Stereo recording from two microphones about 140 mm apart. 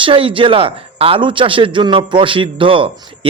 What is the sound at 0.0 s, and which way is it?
A man's voice, 40° right (ahead or behind).